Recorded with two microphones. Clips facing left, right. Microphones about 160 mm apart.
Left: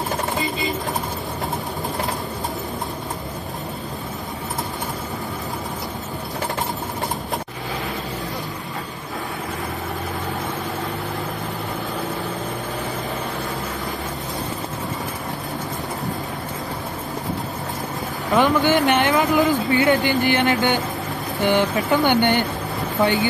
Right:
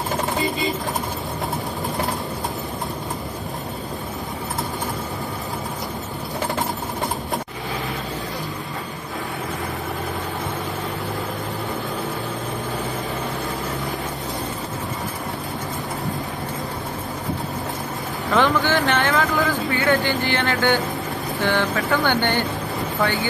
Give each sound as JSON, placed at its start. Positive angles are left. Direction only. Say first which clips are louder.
{"t": 18.3, "sound": "vehicle", "louder": "left 2 dB", "side_deg": 15}
{"t": 21.4, "sound": "speech", "louder": "left 3 dB", "side_deg": 20}